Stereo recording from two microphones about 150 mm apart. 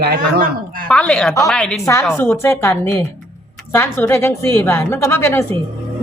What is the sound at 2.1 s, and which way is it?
Speech, 15° left (ahead or behind).